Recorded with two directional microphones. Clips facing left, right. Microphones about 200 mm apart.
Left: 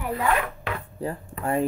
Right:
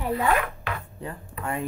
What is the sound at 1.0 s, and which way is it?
Speech, 30° left (ahead or behind).